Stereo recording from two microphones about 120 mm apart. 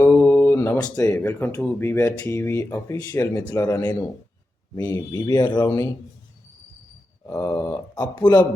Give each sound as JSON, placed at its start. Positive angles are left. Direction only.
{"t": 0.0, "sound": "a sound", "side_deg": 20}
{"t": 0.9, "sound": "speech", "side_deg": 15}
{"t": 7.3, "sound": "speech", "side_deg": 20}